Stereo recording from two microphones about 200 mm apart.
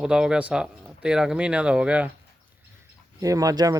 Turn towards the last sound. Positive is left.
turn(degrees=-20)  # may be behind; listen again after turning